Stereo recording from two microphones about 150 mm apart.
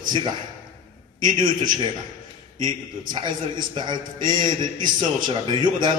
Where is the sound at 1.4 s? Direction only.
30° right (ahead or behind).